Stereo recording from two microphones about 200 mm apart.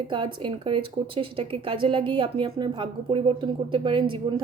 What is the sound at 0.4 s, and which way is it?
A woman's voice, 25° right (ahead or behind).